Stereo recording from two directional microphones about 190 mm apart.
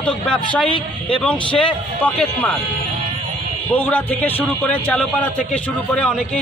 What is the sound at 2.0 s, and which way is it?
Speech, 5° left (ahead or behind).